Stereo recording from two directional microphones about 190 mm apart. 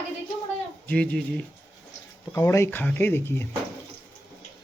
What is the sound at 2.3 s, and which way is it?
Speech, 15° left (ahead or behind).